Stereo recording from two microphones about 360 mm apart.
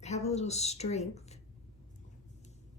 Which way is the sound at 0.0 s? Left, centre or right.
Centre.